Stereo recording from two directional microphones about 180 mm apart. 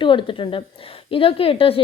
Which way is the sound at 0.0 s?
25° left (ahead or behind).